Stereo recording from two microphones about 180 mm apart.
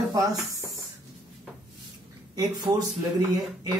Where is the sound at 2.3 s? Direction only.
20° right (ahead or behind).